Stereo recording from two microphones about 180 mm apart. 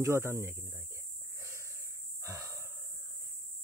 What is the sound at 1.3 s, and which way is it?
Wheeze, 15° right (ahead or behind).